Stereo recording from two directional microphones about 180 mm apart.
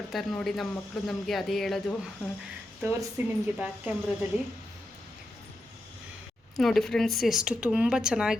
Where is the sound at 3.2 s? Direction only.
10° right (ahead or behind).